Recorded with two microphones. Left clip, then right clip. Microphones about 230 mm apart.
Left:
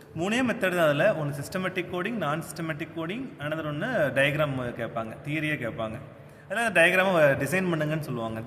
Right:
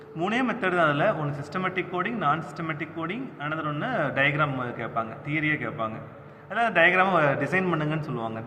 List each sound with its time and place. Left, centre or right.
0.2 s speech: left